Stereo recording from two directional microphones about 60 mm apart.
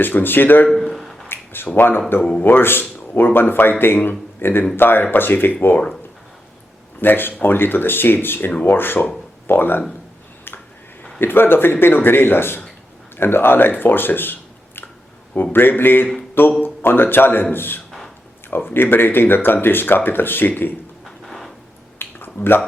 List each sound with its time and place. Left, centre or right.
0.0 s speech: left
0.7 s a sound: centre
1.7 s a man's voice: left
7.0 s speech: left
11.2 s speech: left
15.5 s speech: left
21.2 s a sound: centre
22.0 s a sound: left
22.4 s speech: left